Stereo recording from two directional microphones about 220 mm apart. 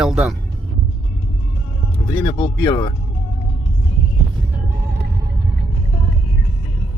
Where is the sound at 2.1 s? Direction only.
20° left (ahead or behind).